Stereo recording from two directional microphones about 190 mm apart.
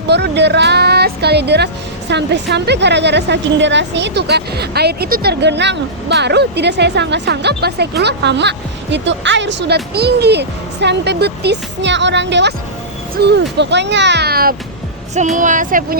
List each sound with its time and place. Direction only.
0.1 s speech: 65° right (ahead or behind)
15.4 s speech: 45° right (ahead or behind)